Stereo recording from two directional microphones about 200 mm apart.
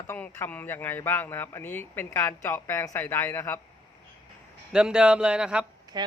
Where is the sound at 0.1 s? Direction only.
10° left (ahead or behind).